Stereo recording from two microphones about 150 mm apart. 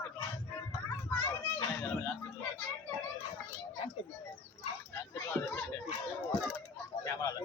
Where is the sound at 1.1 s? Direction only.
15° left (ahead or behind).